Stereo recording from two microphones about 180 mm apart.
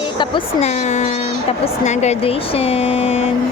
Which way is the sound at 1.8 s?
40° left (ahead or behind).